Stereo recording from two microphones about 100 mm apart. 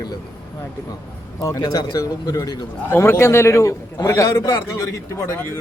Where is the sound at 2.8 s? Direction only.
25° left (ahead or behind).